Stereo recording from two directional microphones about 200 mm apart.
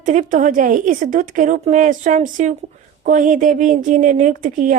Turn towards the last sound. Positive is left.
turn(degrees=-40)  # may be behind; listen again after turning